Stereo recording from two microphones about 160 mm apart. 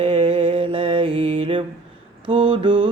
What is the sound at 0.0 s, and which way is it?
Mantra, 35° right (ahead or behind).